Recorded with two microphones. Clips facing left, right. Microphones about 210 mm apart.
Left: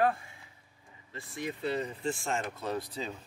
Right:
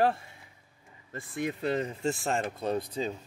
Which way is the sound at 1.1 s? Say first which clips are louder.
Right 5 dB; 55° right (ahead or behind).